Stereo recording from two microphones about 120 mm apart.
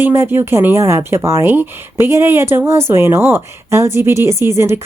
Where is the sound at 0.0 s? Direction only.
20° right (ahead or behind).